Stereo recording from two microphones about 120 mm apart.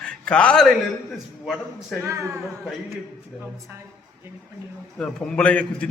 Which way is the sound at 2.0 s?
25° right (ahead or behind).